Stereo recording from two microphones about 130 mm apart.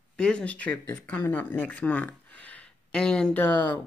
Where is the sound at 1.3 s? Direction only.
15° left (ahead or behind).